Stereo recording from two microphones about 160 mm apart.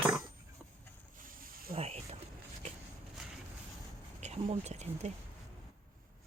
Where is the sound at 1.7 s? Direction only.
40° right (ahead or behind).